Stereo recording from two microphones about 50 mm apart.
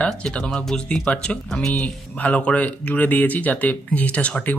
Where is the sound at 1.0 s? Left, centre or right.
Left.